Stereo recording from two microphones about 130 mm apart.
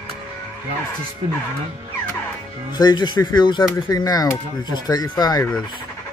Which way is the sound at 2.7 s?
35° left (ahead or behind).